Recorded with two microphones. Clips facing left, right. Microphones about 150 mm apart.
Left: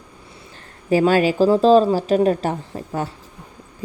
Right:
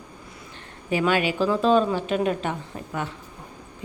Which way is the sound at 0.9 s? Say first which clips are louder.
Left 7 dB; 40° left (ahead or behind).